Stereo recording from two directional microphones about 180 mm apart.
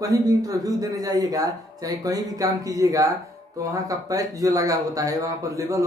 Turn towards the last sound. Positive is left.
turn(degrees=-20)  # may be behind; listen again after turning